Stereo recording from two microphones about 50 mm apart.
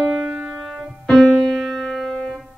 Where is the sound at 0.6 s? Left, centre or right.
Centre.